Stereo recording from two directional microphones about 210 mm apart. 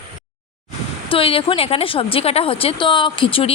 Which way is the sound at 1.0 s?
25° left (ahead or behind).